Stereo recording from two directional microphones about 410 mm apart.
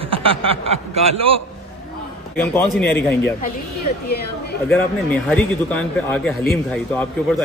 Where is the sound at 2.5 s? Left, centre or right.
Centre.